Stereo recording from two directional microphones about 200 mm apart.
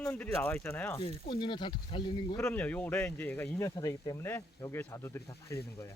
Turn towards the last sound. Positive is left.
turn(degrees=15)  # may be behind; listen again after turning